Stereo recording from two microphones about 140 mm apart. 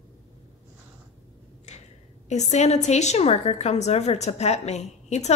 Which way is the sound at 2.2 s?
55° left (ahead or behind).